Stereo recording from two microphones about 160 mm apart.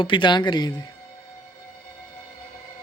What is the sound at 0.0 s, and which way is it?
Speech, 30° left (ahead or behind).